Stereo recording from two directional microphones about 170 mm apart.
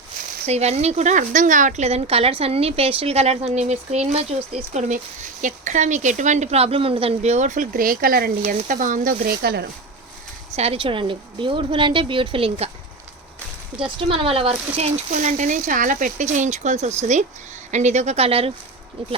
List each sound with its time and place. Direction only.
0.4 s speech: 40° right (ahead or behind); by 9.6 s 70° right (ahead or behind)
10.5 s a woman's voice: 35° right (ahead or behind)
13.7 s speech: 30° right (ahead or behind)